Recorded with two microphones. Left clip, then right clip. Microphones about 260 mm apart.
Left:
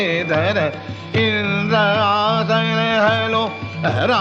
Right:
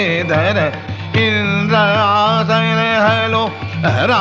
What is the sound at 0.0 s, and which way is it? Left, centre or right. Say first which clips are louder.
Music: right 3 dB; right.